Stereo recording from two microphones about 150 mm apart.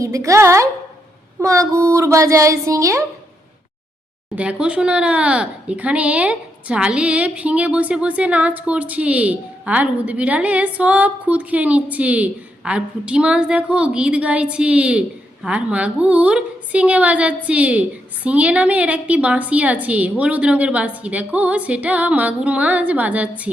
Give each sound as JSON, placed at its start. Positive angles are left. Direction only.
{"t": 0.0, "sound": "speech", "side_deg": -20}
{"t": 4.4, "sound": "speech", "side_deg": -5}